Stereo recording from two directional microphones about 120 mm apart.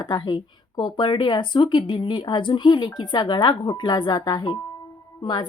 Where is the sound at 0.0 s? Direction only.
35° left (ahead or behind).